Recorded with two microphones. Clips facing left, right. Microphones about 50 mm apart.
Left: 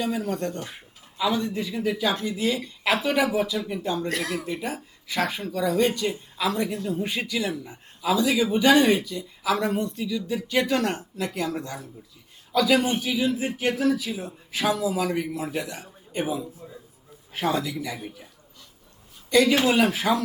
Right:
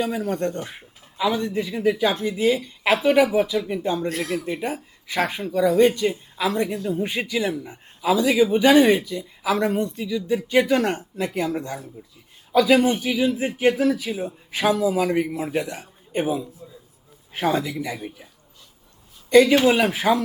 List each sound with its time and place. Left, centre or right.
0.0 s a man's voice: centre
16.6 s a sound: left
17.3 s a man's voice: centre
19.3 s a man's voice: right